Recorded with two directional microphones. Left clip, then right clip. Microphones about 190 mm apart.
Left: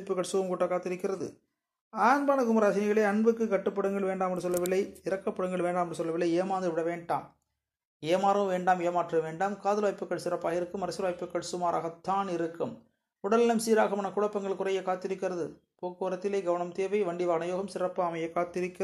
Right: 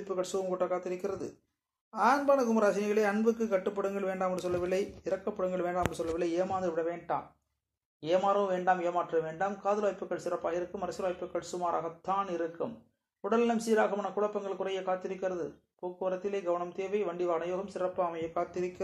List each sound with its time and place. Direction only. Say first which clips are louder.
0.1 s speech: left 3 dB; 35° left (ahead or behind)